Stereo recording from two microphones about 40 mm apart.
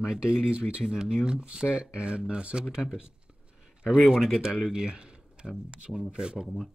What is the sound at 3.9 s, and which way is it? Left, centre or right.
Speech, centre.